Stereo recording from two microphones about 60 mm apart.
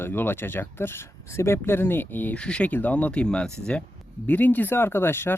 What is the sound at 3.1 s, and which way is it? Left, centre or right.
Speech, centre.